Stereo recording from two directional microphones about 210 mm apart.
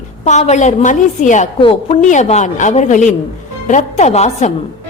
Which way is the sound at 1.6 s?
25° left (ahead or behind).